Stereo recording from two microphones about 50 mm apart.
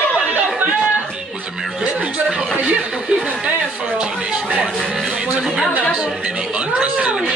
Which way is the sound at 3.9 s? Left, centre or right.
Right.